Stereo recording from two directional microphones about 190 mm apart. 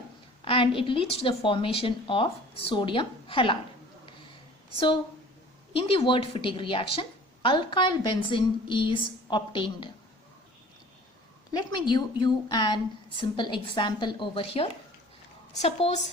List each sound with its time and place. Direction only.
0.4 s a woman's voice: 30° left (ahead or behind)
5.7 s a woman's voice: 30° left (ahead or behind)
11.5 s a woman's voice: 25° left (ahead or behind)